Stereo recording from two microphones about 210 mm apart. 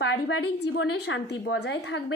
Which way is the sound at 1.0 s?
55° left (ahead or behind).